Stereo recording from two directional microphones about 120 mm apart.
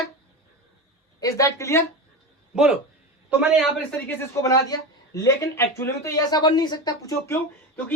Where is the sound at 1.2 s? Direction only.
25° left (ahead or behind).